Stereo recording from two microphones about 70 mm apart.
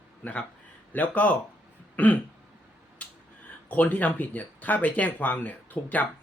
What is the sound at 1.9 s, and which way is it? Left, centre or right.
Throat clearing, left.